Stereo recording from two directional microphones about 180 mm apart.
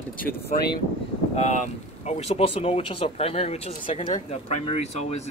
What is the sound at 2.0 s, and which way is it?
Speech, 35° left (ahead or behind).